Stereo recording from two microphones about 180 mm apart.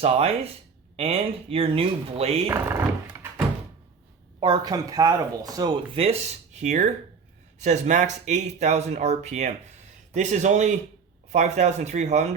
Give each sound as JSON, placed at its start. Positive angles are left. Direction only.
{"t": 0.0, "sound": "speech", "side_deg": -35}
{"t": 2.5, "sound": "speech", "side_deg": -15}
{"t": 4.4, "sound": "speech", "side_deg": -25}